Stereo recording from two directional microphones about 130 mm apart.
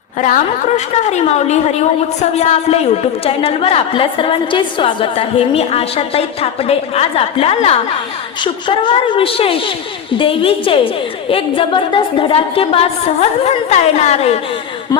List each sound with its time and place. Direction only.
0.9 s a woman's voice: 60° left (ahead or behind)
8.4 s a woman's voice: 35° left (ahead or behind); by 14.3 s 55° left (ahead or behind)